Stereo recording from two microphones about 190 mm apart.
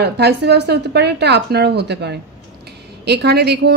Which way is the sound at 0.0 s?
60° right (ahead or behind).